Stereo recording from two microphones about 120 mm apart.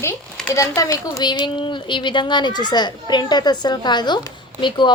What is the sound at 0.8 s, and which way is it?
Speech, 40° left (ahead or behind).